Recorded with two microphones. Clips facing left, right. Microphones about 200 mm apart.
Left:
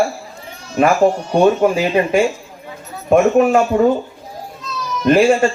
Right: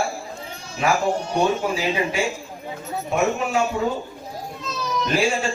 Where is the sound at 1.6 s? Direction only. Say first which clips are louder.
Left 8 dB; 55° left (ahead or behind).